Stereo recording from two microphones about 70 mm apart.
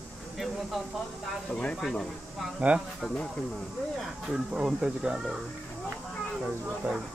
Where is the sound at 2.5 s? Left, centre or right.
Centre.